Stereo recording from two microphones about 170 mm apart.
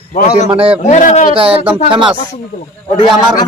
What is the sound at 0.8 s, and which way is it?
Speech, 45° left (ahead or behind).